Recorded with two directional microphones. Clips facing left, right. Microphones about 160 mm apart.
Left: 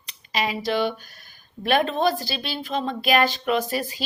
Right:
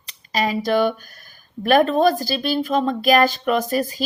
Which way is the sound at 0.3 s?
45° right (ahead or behind).